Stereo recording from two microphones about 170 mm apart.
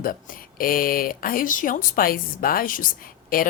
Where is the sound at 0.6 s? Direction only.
55° left (ahead or behind).